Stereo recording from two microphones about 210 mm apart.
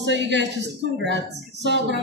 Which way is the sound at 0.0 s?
55° right (ahead or behind).